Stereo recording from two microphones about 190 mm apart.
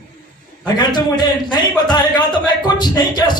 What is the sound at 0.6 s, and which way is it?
A man's voice, 20° left (ahead or behind).